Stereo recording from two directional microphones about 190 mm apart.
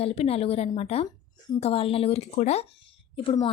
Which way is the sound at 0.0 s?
30° left (ahead or behind).